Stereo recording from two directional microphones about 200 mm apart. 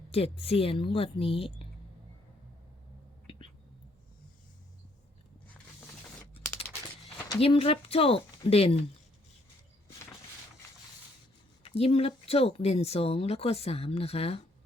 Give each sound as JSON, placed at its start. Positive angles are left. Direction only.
{"t": 0.1, "sound": "speech", "side_deg": 30}
{"t": 3.2, "sound": "whispering", "side_deg": 25}
{"t": 7.3, "sound": "speech", "side_deg": 30}
{"t": 11.6, "sound": "speech", "side_deg": 30}